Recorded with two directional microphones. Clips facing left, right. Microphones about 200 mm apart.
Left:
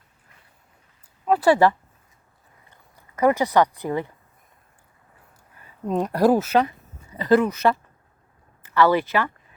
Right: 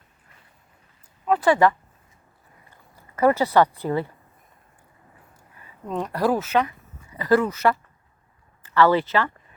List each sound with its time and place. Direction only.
1.3 s speech: 35° left (ahead or behind)
2.6 s speech: 15° left (ahead or behind)
6.1 s speech: 45° left (ahead or behind)
7.2 s speech: 20° left (ahead or behind)